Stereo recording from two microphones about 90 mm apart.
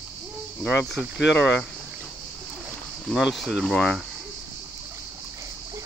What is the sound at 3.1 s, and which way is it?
Speech, centre (ahead or behind).